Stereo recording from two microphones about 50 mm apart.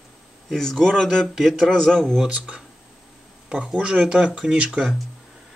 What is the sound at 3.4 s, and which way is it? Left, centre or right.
Speech, centre.